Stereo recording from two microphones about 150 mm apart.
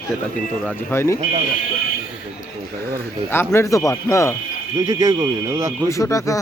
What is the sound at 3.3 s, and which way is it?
Speech, 15° left (ahead or behind).